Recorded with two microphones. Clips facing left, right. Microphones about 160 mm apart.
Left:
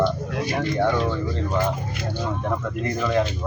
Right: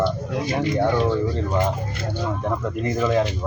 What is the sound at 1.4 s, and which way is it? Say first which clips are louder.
Speech: right 1 dB; 20° right (ahead or behind).